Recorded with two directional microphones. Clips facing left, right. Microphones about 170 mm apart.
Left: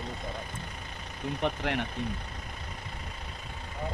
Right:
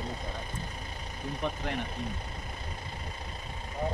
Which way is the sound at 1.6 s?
75° left (ahead or behind).